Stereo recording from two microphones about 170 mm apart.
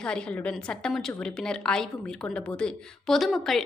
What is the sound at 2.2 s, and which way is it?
Speech, 15° left (ahead or behind).